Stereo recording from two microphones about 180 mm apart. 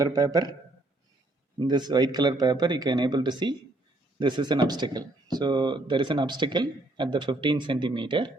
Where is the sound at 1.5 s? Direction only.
25° right (ahead or behind).